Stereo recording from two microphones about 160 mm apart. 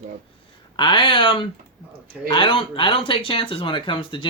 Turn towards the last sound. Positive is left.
turn(degrees=35)  # may be behind; listen again after turning